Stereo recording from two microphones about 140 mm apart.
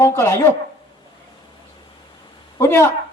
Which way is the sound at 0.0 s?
20° left (ahead or behind).